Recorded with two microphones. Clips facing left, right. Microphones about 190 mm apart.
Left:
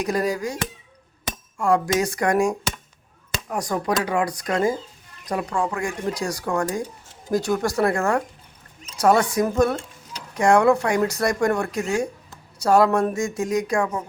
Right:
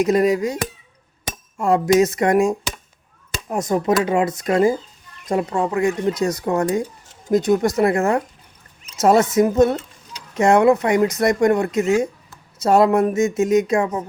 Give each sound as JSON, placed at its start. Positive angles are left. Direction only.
{"t": 0.0, "sound": "speech", "side_deg": -25}